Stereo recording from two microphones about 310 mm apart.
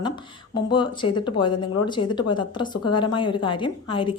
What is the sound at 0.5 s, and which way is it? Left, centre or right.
A woman's voice, centre.